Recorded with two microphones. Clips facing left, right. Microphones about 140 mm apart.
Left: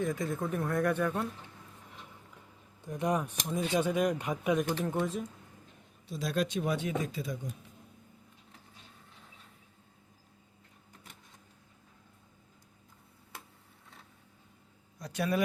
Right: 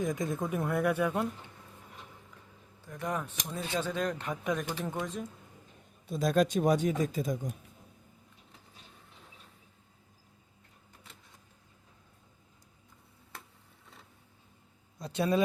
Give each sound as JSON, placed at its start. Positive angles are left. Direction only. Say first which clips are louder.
{"t": 0.0, "sound": "speech", "louder": "even", "side_deg": -15}
{"t": 2.8, "sound": "speech", "louder": "left 4 dB", "side_deg": 20}
{"t": 6.1, "sound": "speech", "louder": "right 5 dB", "side_deg": -50}
{"t": 14.9, "sound": "a sound", "louder": "right 3 dB", "side_deg": -25}